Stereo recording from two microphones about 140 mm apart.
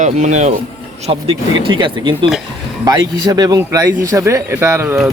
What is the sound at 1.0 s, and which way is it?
Speech, 45° right (ahead or behind).